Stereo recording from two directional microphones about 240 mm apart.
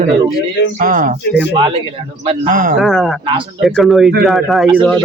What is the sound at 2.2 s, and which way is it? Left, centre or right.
Speech, right.